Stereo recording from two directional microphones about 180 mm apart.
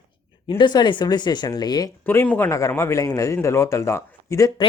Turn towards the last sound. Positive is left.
turn(degrees=20)  # may be behind; listen again after turning